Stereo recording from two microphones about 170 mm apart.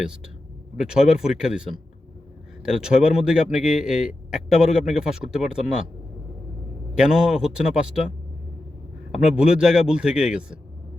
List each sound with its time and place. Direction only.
0.8 s a man's voice: 5° right (ahead or behind)
2.6 s a man's voice: 5° right (ahead or behind)
7.0 s a man's voice: 5° right (ahead or behind)
9.4 s a man's voice: 5° right (ahead or behind)